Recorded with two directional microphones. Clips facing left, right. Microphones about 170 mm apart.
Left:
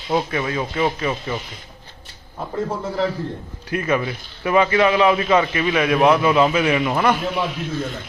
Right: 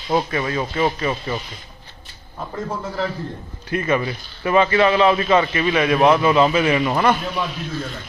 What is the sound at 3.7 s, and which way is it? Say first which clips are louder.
A man's voice: right 1 dB; 5° left (ahead or behind).